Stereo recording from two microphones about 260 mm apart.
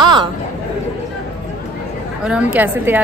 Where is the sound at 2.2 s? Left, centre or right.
Centre.